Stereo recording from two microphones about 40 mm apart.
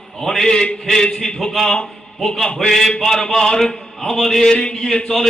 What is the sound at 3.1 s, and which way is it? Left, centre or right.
Speech, centre.